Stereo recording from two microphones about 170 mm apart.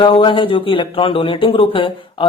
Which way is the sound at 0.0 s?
30° left (ahead or behind).